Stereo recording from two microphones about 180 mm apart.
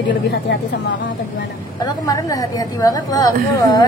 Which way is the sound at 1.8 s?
20° left (ahead or behind).